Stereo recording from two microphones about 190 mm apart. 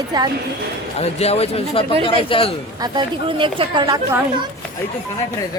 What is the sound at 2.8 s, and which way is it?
Speech, 25° right (ahead or behind).